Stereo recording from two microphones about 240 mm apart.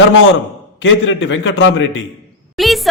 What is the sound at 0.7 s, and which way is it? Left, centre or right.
A man's voice, left.